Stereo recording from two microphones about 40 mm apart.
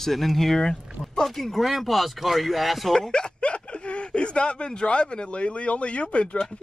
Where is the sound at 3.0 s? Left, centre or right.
Centre.